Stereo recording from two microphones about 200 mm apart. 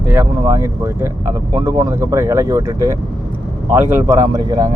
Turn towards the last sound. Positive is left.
turn(degrees=-20)  # may be behind; listen again after turning